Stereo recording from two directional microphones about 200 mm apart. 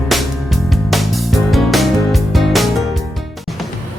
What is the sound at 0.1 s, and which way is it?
Music, centre (ahead or behind).